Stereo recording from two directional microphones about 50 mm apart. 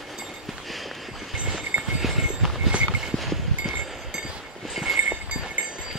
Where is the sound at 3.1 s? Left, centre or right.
Centre.